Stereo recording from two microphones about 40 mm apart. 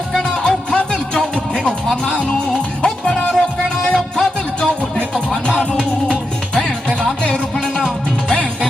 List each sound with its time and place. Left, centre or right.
0.1 s music: centre
7.5 s music: centre